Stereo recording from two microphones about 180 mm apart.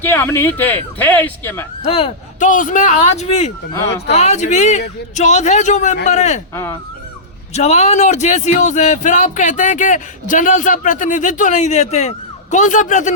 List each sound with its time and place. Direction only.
0.0 s speech: 10° left (ahead or behind)
1.8 s speech: 35° left (ahead or behind)
2.5 s a man's voice: 45° left (ahead or behind)
6.5 s speech: 15° left (ahead or behind)
7.5 s speech: 40° left (ahead or behind)